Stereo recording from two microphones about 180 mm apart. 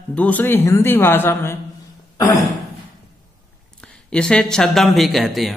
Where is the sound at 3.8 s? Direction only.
5° left (ahead or behind).